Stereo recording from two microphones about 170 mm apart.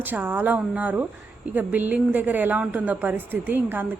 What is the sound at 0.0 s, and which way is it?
A woman's voice, 10° right (ahead or behind).